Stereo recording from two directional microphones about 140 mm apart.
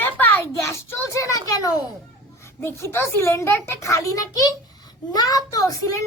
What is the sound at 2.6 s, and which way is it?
A child's voice, 20° left (ahead or behind).